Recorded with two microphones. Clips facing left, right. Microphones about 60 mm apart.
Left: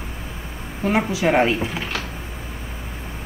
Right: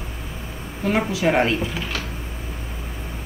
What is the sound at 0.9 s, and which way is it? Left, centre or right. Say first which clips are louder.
Speech: left 1 dB; centre.